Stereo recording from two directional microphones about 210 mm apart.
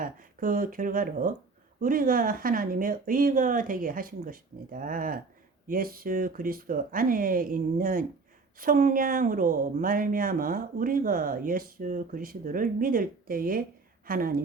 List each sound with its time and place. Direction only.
0.0 s speech: 40° right (ahead or behind)